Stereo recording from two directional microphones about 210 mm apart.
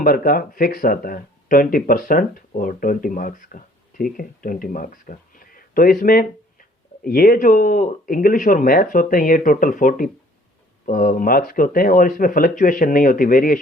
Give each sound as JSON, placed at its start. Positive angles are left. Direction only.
{"t": 0.0, "sound": "speech", "side_deg": 45}